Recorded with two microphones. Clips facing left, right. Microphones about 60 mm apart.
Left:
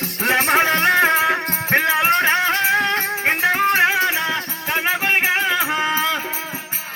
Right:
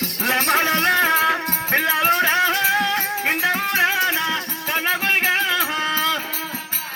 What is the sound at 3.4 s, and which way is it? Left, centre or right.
Music, left.